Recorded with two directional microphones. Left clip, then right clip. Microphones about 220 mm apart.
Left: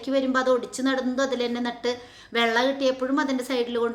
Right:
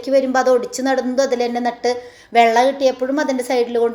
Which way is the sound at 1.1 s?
10° right (ahead or behind).